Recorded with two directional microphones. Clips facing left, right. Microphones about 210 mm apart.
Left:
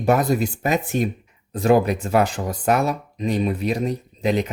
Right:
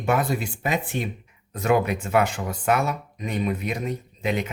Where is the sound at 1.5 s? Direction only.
30° left (ahead or behind).